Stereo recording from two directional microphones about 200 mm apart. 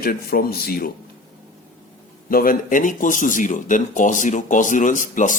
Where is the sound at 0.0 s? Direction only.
50° left (ahead or behind).